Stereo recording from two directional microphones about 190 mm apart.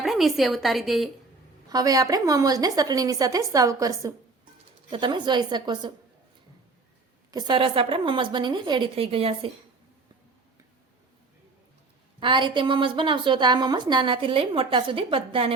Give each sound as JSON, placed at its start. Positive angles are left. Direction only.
{"t": 0.0, "sound": "a woman's voice", "side_deg": 0}
{"t": 1.7, "sound": "a woman's voice", "side_deg": -20}
{"t": 7.3, "sound": "a woman's voice", "side_deg": -20}
{"t": 12.2, "sound": "a woman's voice", "side_deg": -25}